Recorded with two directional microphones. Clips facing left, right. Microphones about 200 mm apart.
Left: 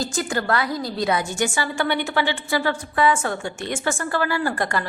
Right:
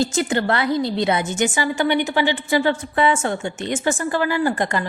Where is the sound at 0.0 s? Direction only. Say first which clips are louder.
Right 5 dB; 25° right (ahead or behind).